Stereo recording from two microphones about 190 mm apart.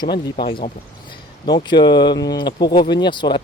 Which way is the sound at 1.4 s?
25° left (ahead or behind).